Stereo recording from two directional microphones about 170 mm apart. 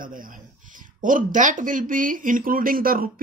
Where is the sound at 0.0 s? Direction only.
55° right (ahead or behind).